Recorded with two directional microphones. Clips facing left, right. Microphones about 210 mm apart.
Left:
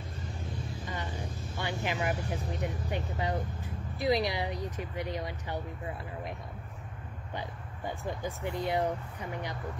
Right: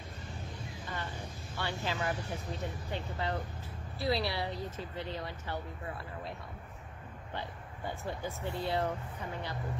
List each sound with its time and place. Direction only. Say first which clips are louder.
1.6 s speech: left 2 dB; 15° left (ahead or behind)
7.3 s speech: left 2 dB; 15° left (ahead or behind)